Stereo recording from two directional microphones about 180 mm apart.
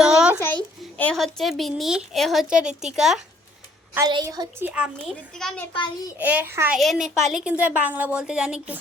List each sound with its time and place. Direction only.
0.0 s a sound: 5° right (ahead or behind)
0.4 s a child's voice: 10° left (ahead or behind)
3.9 s a woman's voice: 20° right (ahead or behind)
4.6 s a child's voice: 5° right (ahead or behind)
6.1 s a child's voice: 10° right (ahead or behind)
6.7 s a child's voice: centre (ahead or behind)